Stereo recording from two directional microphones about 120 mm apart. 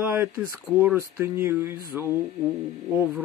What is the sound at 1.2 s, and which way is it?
Speech, 20° right (ahead or behind).